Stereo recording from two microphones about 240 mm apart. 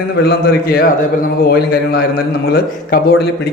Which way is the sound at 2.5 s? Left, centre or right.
Left.